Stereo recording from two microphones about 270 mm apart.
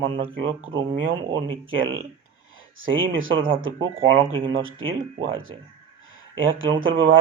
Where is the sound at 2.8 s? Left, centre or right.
Right.